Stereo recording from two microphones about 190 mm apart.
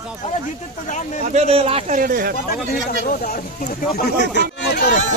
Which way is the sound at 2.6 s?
50° left (ahead or behind).